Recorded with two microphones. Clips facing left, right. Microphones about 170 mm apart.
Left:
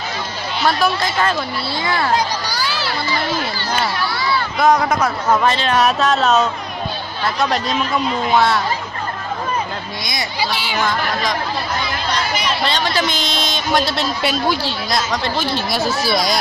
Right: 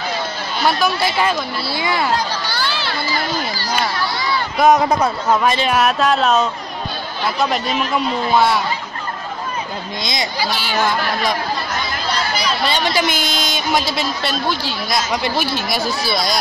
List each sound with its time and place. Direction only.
0.7 s a man's voice: centre (ahead or behind)
1.0 s speech: 10° right (ahead or behind)
4.6 s speech: 20° right (ahead or behind)
5.4 s a man's voice: 10° right (ahead or behind)
12.1 s chatter: 35° right (ahead or behind)
12.6 s a man's voice: 10° right (ahead or behind)